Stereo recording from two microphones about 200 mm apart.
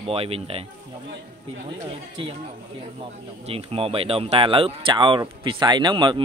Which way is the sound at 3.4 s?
30° right (ahead or behind).